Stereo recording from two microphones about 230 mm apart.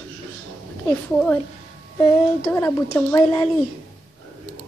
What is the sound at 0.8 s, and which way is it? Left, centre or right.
Speech, centre.